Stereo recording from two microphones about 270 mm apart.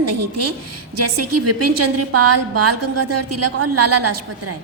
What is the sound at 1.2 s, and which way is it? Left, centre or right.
A woman's voice, right.